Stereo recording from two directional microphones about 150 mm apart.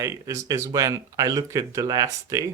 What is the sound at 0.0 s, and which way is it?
Speech, 20° right (ahead or behind).